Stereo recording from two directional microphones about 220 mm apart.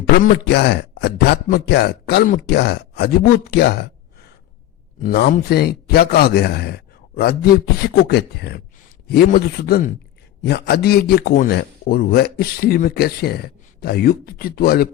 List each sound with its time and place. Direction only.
0.3 s a man's voice: 50° left (ahead or behind)
5.0 s a man's voice: 40° left (ahead or behind)